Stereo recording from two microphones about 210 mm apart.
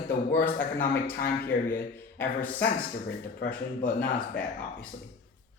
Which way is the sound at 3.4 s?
45° left (ahead or behind).